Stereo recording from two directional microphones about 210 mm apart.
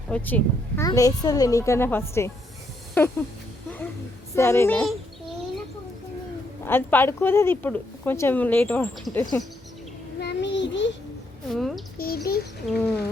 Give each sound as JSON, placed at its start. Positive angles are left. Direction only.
{"t": 0.1, "sound": "speech", "side_deg": 10}
{"t": 4.4, "sound": "speech", "side_deg": 10}
{"t": 6.7, "sound": "speech", "side_deg": 10}
{"t": 10.2, "sound": "child singing", "side_deg": 55}
{"t": 11.4, "sound": "speech", "side_deg": 0}
{"t": 11.9, "sound": "speech", "side_deg": 45}
{"t": 12.6, "sound": "speech", "side_deg": 5}